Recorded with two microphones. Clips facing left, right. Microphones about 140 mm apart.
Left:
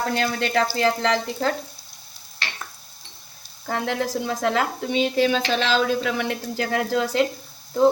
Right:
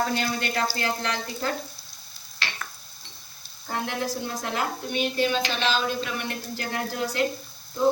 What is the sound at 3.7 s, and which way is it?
A woman's voice, 90° left.